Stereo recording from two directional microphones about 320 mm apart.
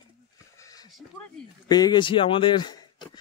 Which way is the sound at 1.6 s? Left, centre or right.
Centre.